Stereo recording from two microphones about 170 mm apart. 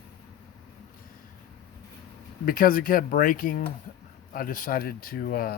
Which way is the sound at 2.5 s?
55° left (ahead or behind).